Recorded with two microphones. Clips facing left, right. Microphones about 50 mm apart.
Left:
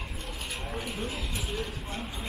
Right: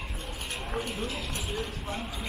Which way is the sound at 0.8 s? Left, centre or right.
Right.